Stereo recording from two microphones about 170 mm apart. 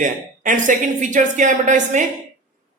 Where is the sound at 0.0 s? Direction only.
50° right (ahead or behind).